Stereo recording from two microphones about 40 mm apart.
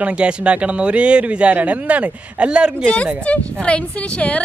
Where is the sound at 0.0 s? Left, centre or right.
Right.